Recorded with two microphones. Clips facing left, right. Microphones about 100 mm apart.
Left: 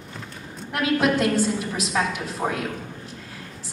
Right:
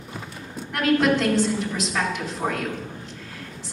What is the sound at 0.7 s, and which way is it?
A woman's voice, 5° left (ahead or behind).